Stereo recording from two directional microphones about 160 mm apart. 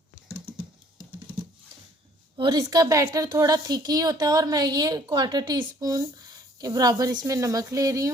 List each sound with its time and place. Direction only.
2.4 s a woman's voice: 25° right (ahead or behind)